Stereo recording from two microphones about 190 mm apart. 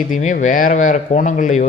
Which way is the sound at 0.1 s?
40° left (ahead or behind).